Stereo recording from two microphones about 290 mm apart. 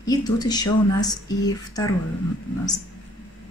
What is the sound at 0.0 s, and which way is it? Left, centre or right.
Speech, centre.